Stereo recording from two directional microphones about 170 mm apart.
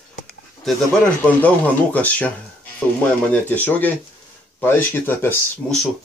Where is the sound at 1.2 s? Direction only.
10° left (ahead or behind).